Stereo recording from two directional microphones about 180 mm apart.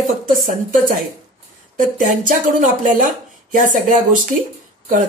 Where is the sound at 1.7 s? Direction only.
45° right (ahead or behind).